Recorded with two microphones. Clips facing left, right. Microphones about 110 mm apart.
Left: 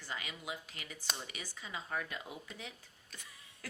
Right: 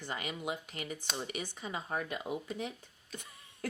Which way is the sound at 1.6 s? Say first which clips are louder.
Right 2 dB; 35° right (ahead or behind).